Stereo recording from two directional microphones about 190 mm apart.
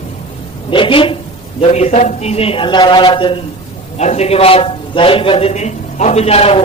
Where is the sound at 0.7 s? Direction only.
25° left (ahead or behind).